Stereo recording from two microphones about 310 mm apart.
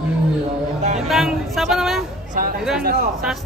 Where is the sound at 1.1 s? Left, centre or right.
Centre.